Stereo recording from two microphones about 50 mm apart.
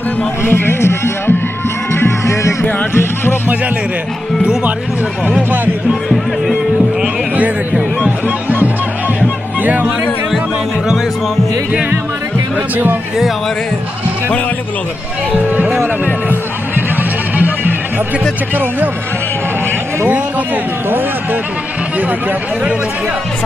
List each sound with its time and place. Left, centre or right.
0.4 s speech: left
1.9 s music: left
2.9 s speech: left
9.6 s speech: right
15.3 s speech: right
16.3 s music: right
18.5 s speech: right